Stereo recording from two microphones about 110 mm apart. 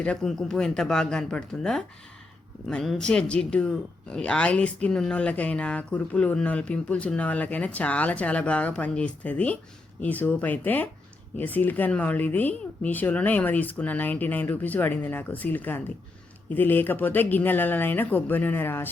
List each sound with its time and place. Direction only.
0.0 s speech: 10° left (ahead or behind)